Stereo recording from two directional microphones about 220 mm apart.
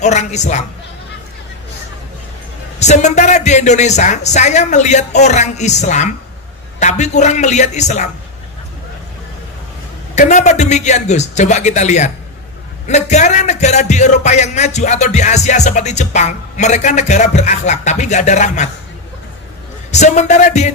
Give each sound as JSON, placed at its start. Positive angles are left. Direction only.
{"t": 0.0, "sound": "a man's voice", "side_deg": 30}
{"t": 2.8, "sound": "a man's voice", "side_deg": 30}
{"t": 10.1, "sound": "a man's voice", "side_deg": 35}
{"t": 19.9, "sound": "a man's voice", "side_deg": 30}